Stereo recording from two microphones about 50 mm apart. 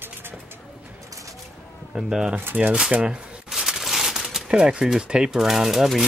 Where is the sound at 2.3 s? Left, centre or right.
Right.